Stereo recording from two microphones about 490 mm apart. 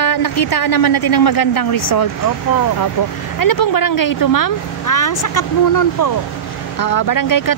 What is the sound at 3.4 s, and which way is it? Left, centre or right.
Speech, left.